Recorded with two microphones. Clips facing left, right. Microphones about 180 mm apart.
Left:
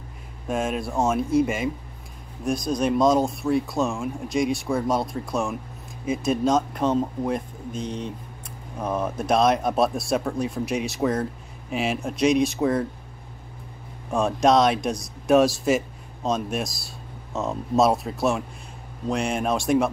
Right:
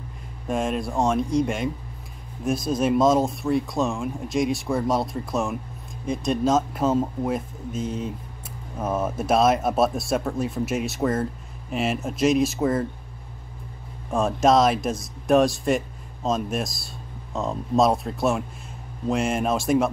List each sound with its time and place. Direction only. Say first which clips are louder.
0.5 s speech: right 1 dB; centre (ahead or behind)
14.1 s speech: even; centre (ahead or behind)